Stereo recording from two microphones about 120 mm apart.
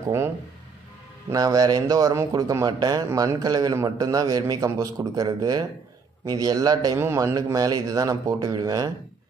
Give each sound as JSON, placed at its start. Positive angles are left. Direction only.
{"t": 1.3, "sound": "a man's voice", "side_deg": -30}
{"t": 7.0, "sound": "a man's voice", "side_deg": -20}